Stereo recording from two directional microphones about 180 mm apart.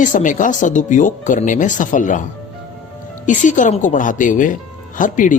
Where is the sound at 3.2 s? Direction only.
45° left (ahead or behind).